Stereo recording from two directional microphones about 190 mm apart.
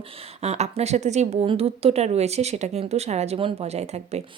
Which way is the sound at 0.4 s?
35° right (ahead or behind).